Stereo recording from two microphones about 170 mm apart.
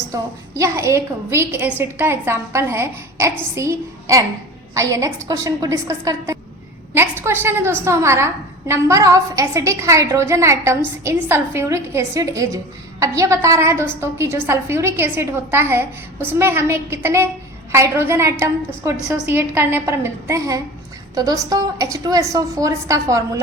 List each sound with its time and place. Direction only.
0.1 s a woman's voice: 15° right (ahead or behind)